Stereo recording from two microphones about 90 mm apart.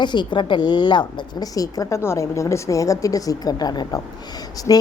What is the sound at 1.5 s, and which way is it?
A woman's voice, 40° left (ahead or behind).